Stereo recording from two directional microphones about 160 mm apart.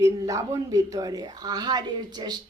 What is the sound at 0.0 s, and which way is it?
Speech, 20° right (ahead or behind).